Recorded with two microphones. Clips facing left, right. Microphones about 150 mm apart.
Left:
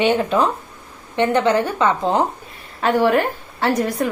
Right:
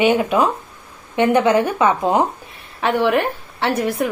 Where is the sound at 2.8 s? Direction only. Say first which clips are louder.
Left 1 dB; centre (ahead or behind).